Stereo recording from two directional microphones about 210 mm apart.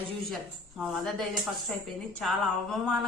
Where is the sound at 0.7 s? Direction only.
Centre (ahead or behind).